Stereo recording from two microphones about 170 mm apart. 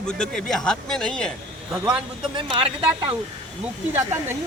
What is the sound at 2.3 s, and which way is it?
Speech, 30° right (ahead or behind).